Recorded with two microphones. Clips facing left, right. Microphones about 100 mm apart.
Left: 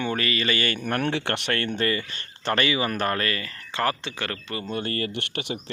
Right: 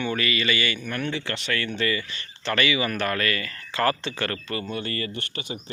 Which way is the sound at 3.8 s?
10° left (ahead or behind).